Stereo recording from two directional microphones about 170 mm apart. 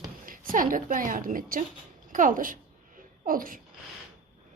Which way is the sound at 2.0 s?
50° right (ahead or behind).